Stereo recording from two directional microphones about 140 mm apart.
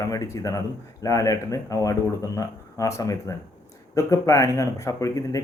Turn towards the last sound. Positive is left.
turn(degrees=25)  # may be behind; listen again after turning